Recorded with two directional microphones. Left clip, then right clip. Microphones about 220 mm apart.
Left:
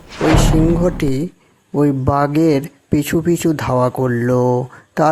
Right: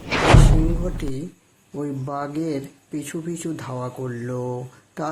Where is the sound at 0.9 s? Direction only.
35° left (ahead or behind).